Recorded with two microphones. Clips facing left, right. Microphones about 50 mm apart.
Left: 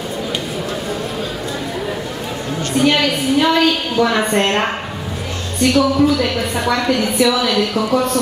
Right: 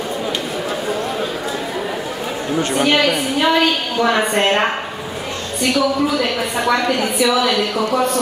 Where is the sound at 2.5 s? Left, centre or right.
Centre.